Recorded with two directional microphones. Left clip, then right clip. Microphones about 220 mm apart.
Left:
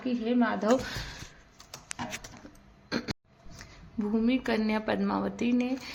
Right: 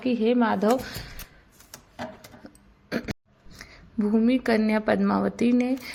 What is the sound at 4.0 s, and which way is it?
A woman's voice, 20° right (ahead or behind).